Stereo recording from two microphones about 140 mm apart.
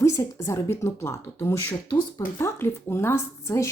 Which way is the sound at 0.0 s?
20° left (ahead or behind).